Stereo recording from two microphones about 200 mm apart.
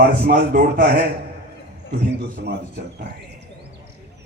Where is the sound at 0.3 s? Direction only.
45° right (ahead or behind).